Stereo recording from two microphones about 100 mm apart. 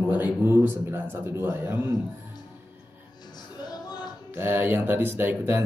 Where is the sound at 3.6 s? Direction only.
45° left (ahead or behind).